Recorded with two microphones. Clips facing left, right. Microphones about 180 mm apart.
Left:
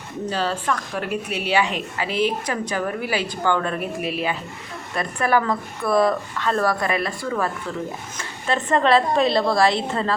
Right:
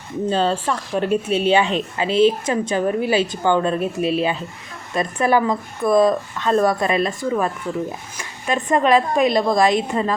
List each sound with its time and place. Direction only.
0.3 s a woman's voice: 25° right (ahead or behind)